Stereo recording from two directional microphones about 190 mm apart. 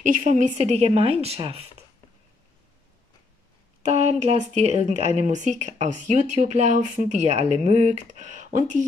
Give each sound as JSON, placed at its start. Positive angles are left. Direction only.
{"t": 0.0, "sound": "speech", "side_deg": -40}
{"t": 3.8, "sound": "speech", "side_deg": -35}